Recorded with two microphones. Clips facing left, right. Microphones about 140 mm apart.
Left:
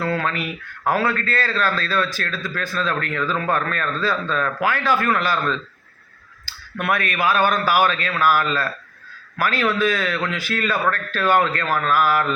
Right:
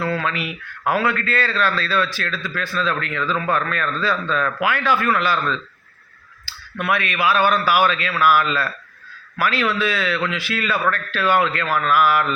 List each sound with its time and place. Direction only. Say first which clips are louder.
0.9 s a man's voice: even; 40° left (ahead or behind)